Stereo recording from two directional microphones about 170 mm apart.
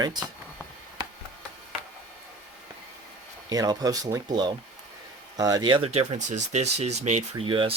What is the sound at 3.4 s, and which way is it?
Speech, 20° right (ahead or behind).